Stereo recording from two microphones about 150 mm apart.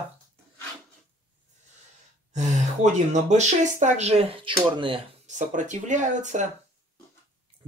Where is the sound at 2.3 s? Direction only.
50° right (ahead or behind); by 5.0 s 35° right (ahead or behind).